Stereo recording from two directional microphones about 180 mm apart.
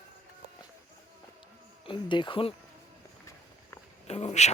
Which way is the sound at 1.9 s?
25° left (ahead or behind).